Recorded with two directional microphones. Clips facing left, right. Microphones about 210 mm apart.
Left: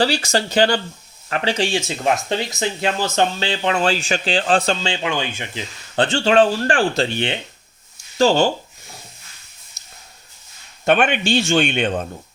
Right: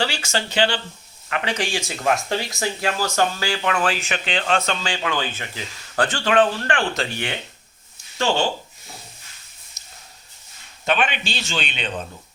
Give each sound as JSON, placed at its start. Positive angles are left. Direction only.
{"t": 0.0, "sound": "speech", "side_deg": 35}
{"t": 1.3, "sound": "speech", "side_deg": 30}
{"t": 8.2, "sound": "speech", "side_deg": 35}
{"t": 10.8, "sound": "speech", "side_deg": 50}